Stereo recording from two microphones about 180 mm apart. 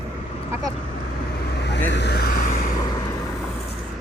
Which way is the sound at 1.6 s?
70° left (ahead or behind).